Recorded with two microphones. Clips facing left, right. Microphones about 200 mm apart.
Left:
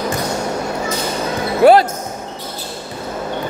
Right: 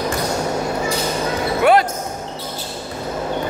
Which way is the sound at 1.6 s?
35° left (ahead or behind).